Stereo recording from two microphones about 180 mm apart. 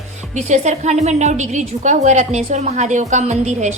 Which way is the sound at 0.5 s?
40° right (ahead or behind).